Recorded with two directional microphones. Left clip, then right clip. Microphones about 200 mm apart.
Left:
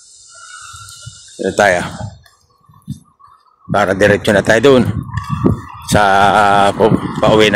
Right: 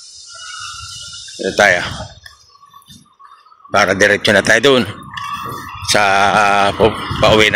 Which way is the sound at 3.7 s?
20° left (ahead or behind).